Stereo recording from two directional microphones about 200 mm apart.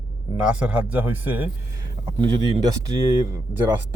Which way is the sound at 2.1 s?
20° right (ahead or behind).